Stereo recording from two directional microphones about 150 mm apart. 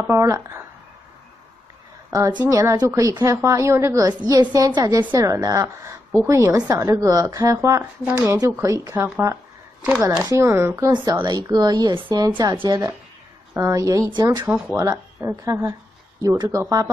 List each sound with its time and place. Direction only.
0.0 s speech: 20° right (ahead or behind)
2.0 s a woman's voice: 20° right (ahead or behind)
10.3 s a woman's voice: 15° right (ahead or behind)
15.1 s a woman's voice: 15° right (ahead or behind)